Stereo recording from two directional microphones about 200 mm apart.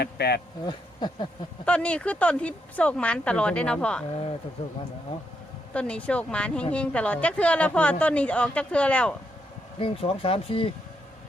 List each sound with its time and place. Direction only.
0.0 s speech: 55° left (ahead or behind)
0.6 s speech: 20° left (ahead or behind)
1.6 s a woman's voice: 5° left (ahead or behind)
5.7 s a woman's voice: 5° left (ahead or behind)
9.7 s speech: 25° left (ahead or behind)